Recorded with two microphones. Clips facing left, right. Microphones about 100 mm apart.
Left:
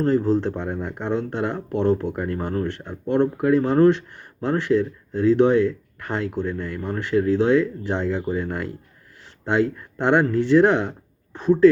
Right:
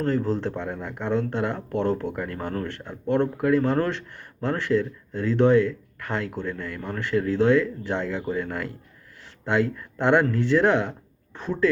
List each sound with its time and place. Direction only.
0.0 s speech: 20° left (ahead or behind)